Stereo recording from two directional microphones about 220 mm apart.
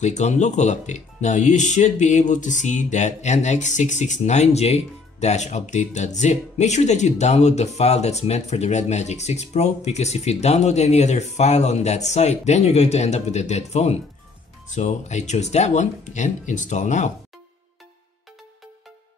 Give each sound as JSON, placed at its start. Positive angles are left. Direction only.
{"t": 0.0, "sound": "speech", "side_deg": 30}